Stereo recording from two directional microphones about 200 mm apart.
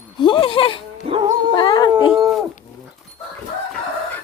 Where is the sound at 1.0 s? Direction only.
25° right (ahead or behind).